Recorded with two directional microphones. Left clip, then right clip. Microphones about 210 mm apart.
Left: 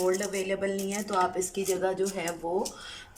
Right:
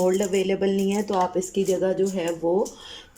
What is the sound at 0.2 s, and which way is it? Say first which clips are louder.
Speech: right 7 dB; 30° right (ahead or behind).